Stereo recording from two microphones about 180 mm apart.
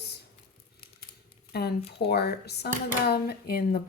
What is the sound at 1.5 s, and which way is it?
Speech, 60° left (ahead or behind).